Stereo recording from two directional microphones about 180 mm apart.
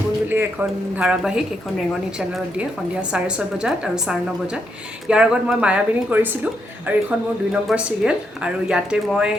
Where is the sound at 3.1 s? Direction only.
5° right (ahead or behind).